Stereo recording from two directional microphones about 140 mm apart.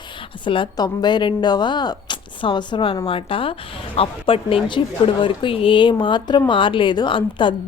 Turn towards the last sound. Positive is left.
turn(degrees=35)  # may be behind; listen again after turning